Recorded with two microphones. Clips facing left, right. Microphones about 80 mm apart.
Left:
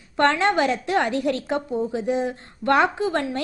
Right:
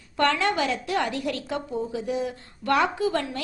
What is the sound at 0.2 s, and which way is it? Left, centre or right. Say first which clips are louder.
A woman's voice: left 4 dB; left.